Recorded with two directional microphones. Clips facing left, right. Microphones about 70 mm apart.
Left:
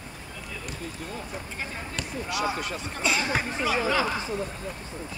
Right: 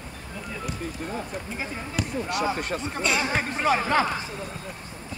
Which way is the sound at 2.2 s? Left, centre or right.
Right.